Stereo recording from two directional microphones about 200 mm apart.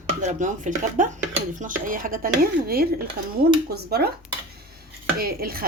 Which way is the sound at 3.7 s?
50° right (ahead or behind).